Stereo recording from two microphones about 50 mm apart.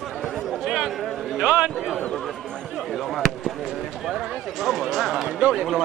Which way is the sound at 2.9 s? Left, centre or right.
Centre.